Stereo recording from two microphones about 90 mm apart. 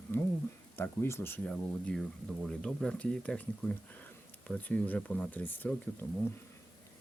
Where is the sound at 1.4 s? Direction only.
10° left (ahead or behind).